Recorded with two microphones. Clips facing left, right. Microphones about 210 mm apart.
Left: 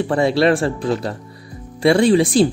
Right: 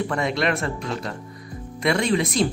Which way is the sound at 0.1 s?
30° left (ahead or behind).